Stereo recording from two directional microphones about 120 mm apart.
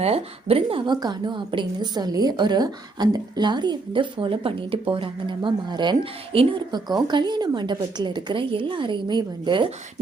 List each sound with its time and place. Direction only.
0.0 s a woman's voice: 55° right (ahead or behind)
0.9 s a woman's voice: 35° right (ahead or behind)